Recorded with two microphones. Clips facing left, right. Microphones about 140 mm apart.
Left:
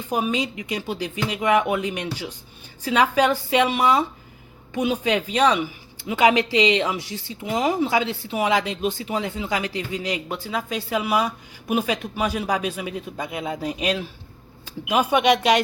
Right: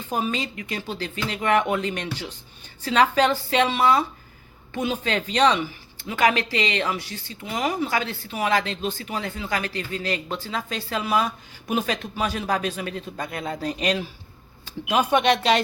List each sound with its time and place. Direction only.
0.1 s speech: 10° left (ahead or behind)